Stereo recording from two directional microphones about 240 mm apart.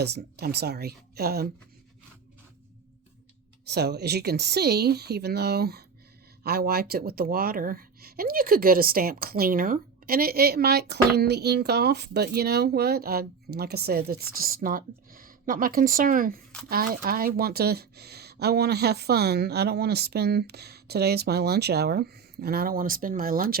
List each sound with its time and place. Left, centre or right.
0.0 s speech: right
3.7 s speech: right